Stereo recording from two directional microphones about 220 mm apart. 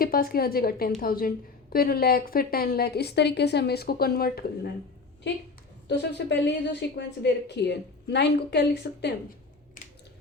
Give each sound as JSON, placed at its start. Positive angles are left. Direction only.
{"t": 0.0, "sound": "a woman's voice", "side_deg": 40}
{"t": 5.9, "sound": "a woman's voice", "side_deg": 50}